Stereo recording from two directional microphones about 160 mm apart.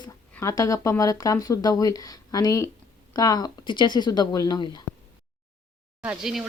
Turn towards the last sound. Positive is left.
turn(degrees=-5)  # may be behind; listen again after turning